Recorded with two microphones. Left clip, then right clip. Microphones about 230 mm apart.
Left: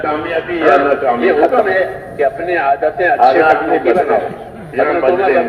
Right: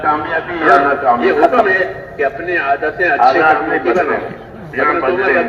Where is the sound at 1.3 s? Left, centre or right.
Centre.